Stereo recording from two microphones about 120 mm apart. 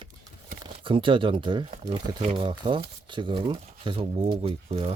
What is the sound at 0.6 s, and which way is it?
Speech, 45° right (ahead or behind).